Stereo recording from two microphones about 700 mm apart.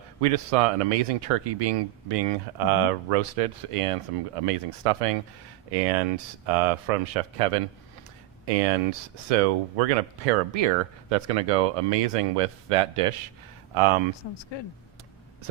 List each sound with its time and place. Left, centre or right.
0.2 s speech: right